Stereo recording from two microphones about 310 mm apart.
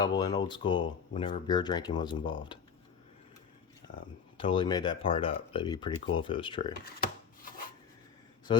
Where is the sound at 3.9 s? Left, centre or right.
Centre.